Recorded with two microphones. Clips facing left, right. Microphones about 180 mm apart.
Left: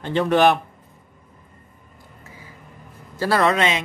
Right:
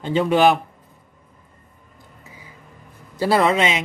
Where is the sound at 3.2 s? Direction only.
15° right (ahead or behind).